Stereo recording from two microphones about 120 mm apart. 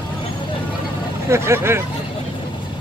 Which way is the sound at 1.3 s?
20° right (ahead or behind).